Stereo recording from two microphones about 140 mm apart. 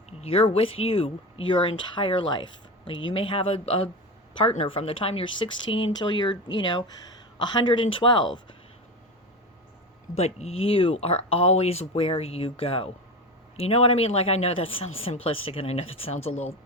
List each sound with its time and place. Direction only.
0.2 s speech: 45° left (ahead or behind)
10.2 s speech: 50° left (ahead or behind)